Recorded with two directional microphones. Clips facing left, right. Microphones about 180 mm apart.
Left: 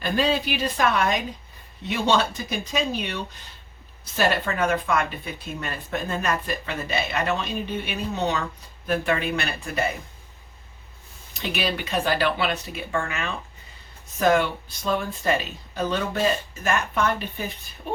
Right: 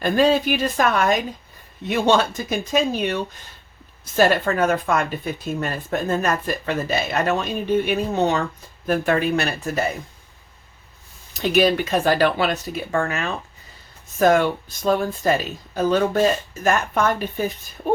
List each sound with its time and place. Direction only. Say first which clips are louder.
0.0 s speech: right 6 dB; 45° right (ahead or behind)
11.5 s speech: right 9 dB; 45° right (ahead or behind)